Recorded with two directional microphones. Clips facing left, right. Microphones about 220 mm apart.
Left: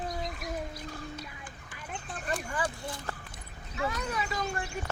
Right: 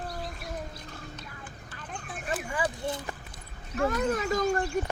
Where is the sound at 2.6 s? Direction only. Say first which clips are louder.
Right 4 dB; 15° right (ahead or behind).